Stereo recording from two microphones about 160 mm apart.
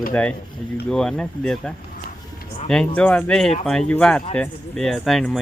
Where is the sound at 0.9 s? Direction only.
5° left (ahead or behind).